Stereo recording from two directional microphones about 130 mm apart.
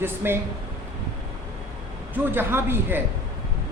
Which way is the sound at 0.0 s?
20° right (ahead or behind).